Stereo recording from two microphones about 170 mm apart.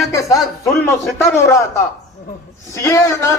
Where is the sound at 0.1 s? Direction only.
20° left (ahead or behind).